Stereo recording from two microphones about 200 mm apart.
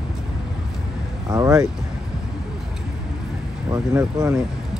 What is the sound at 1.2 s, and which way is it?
Speech, 15° right (ahead or behind).